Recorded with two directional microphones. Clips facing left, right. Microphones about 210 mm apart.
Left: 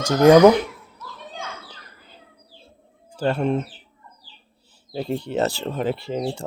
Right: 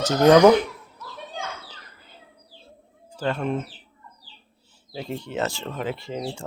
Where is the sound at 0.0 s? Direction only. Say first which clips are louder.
Left 2 dB; 10° left (ahead or behind).